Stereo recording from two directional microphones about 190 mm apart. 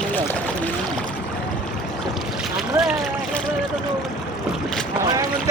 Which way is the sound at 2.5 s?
Centre (ahead or behind).